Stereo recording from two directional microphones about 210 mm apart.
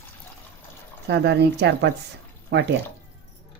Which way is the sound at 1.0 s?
55° right (ahead or behind).